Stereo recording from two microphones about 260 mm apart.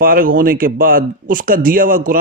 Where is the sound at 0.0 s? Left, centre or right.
Right.